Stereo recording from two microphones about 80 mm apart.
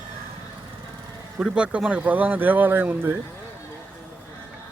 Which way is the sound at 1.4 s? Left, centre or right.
Centre.